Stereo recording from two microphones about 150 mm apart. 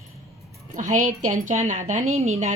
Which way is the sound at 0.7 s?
55° right (ahead or behind).